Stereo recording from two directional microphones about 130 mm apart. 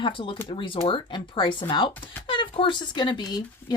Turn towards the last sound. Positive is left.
turn(degrees=35)  # may be behind; listen again after turning